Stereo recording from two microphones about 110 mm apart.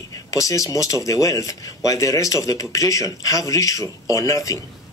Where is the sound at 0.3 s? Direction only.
30° left (ahead or behind).